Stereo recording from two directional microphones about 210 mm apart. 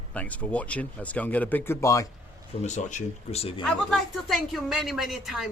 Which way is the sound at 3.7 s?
Centre (ahead or behind).